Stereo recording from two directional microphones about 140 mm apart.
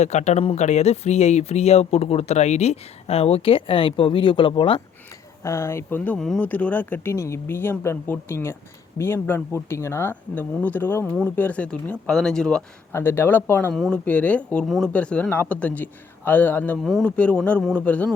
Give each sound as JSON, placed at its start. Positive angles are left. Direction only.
{"t": 0.0, "sound": "speech", "side_deg": 55}
{"t": 5.4, "sound": "speech", "side_deg": 20}
{"t": 6.1, "sound": "speech", "side_deg": 5}
{"t": 12.9, "sound": "speech", "side_deg": 15}
{"t": 13.7, "sound": "speech", "side_deg": 0}